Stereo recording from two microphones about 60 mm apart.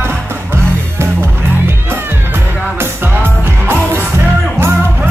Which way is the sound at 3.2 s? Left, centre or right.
Right.